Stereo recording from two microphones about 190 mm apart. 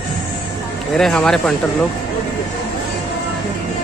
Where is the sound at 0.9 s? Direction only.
5° left (ahead or behind).